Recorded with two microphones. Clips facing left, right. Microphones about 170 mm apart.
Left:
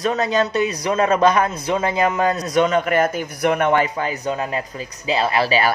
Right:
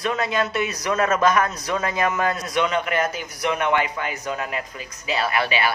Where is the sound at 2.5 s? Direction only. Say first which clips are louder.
Left 5 dB; 45° left (ahead or behind).